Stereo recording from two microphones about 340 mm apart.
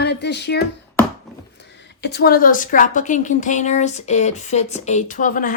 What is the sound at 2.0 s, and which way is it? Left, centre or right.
A woman's voice, left.